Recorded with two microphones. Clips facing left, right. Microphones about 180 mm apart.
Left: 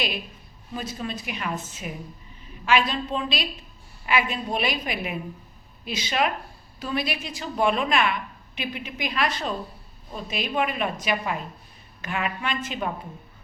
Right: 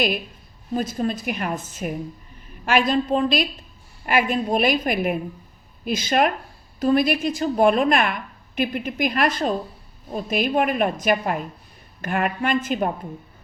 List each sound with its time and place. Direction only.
0.7 s a woman's voice: 45° right (ahead or behind)